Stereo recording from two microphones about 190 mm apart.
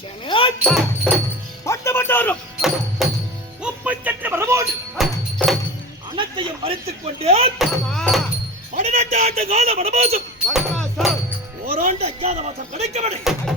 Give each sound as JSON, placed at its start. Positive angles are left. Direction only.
{"t": 0.3, "sound": "a sound", "side_deg": 25}
{"t": 0.6, "sound": "music", "side_deg": 10}
{"t": 2.6, "sound": "music", "side_deg": 0}
{"t": 4.9, "sound": "music", "side_deg": 0}
{"t": 6.1, "sound": "a sound", "side_deg": -25}
{"t": 7.6, "sound": "music", "side_deg": 5}
{"t": 8.7, "sound": "a sound", "side_deg": -35}
{"t": 10.5, "sound": "music", "side_deg": 0}
{"t": 11.7, "sound": "chop", "side_deg": -35}